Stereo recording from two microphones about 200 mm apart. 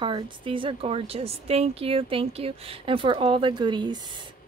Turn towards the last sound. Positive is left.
turn(degrees=-20)  # may be behind; listen again after turning